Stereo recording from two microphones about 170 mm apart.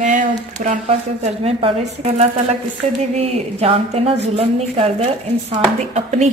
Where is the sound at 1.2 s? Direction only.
35° right (ahead or behind).